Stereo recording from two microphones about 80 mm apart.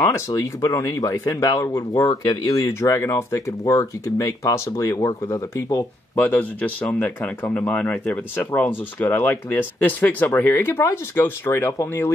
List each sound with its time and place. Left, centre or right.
0.0 s speech: left
6.1 s speech: left